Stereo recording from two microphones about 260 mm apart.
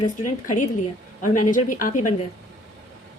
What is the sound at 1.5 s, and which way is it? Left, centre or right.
Speech, left.